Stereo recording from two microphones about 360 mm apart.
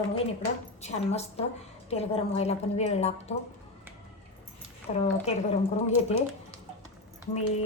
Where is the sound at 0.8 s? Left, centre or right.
Centre.